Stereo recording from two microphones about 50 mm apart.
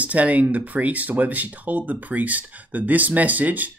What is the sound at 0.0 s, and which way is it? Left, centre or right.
Speech, right.